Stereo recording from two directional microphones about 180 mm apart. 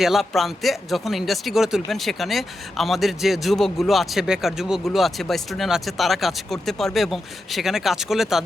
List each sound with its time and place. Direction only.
0.0 s speech: centre (ahead or behind)